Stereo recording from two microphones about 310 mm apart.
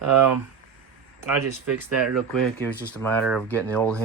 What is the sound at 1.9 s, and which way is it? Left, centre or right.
Speech, centre.